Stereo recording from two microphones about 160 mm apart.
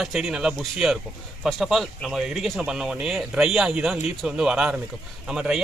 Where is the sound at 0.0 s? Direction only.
Centre (ahead or behind).